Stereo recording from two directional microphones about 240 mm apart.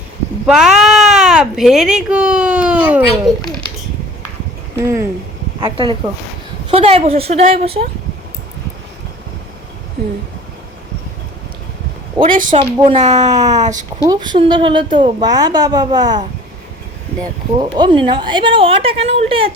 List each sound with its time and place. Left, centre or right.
0.4 s speech: centre
4.8 s a woman's voice: centre
12.2 s a woman's voice: right
13.2 s a woman's voice: centre
17.6 s a woman's voice: centre